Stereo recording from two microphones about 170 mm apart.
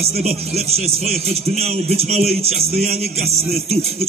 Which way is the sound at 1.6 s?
40° right (ahead or behind).